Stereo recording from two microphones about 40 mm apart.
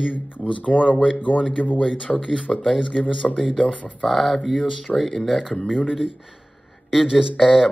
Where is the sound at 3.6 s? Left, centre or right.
Left.